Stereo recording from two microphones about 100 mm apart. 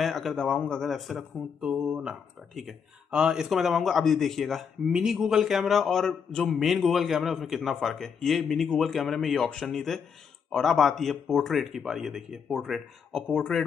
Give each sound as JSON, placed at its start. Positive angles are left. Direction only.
{"t": 0.0, "sound": "speech", "side_deg": 0}
{"t": 1.6, "sound": "a sound", "side_deg": -10}
{"t": 2.5, "sound": "speech", "side_deg": -5}